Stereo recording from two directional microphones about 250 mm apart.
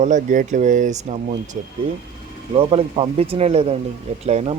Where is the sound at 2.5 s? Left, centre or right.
Right.